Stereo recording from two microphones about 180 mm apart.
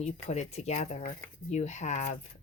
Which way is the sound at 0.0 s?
35° left (ahead or behind).